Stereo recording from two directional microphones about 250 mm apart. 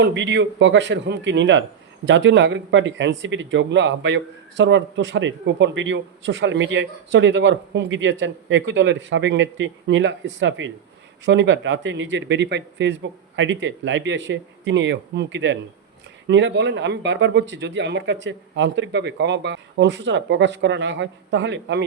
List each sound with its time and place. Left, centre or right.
0.0 s speech: right